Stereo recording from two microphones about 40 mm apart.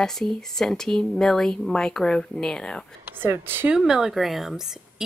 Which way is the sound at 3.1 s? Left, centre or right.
Right.